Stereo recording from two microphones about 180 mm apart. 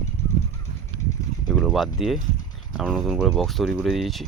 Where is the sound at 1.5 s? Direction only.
Centre (ahead or behind).